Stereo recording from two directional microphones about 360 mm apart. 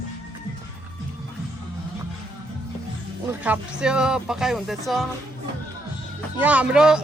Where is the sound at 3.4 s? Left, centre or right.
Centre.